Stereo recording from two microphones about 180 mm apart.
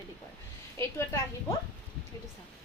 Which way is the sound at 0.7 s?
15° left (ahead or behind).